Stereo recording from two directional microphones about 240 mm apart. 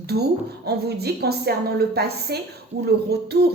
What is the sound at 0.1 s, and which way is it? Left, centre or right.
Speech, right.